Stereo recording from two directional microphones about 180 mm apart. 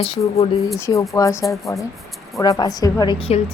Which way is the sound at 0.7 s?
15° left (ahead or behind).